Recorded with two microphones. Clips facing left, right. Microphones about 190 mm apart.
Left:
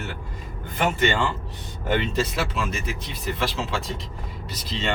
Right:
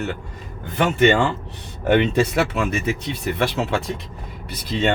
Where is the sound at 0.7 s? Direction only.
65° right (ahead or behind).